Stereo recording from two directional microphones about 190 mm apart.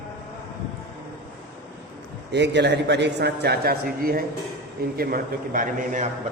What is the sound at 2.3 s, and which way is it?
A man's voice, 65° right (ahead or behind).